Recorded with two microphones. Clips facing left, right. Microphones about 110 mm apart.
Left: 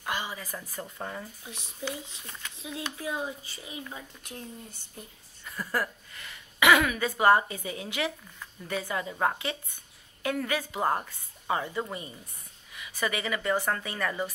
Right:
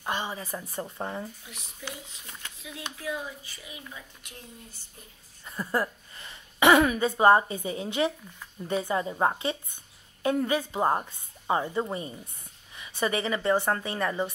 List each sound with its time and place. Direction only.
0.0 s a woman's voice: 25° right (ahead or behind)
1.4 s speech: 25° left (ahead or behind)
3.0 s speech: 25° left (ahead or behind)
5.4 s a woman's voice: 25° right (ahead or behind)